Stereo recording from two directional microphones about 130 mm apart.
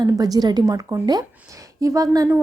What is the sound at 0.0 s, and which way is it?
A woman's voice, 30° right (ahead or behind).